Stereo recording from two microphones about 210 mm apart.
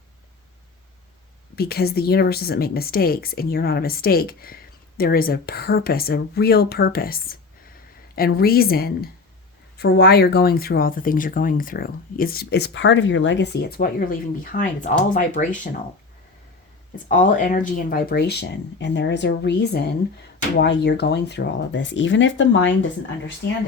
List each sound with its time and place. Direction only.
1.5 s a woman's voice: 50° left (ahead or behind)
8.4 s a woman's voice: 45° left (ahead or behind)
17.1 s a woman's voice: 40° left (ahead or behind); by 22.9 s 60° left (ahead or behind)